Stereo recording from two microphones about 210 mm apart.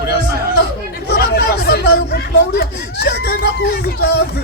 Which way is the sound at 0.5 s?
50° left (ahead or behind).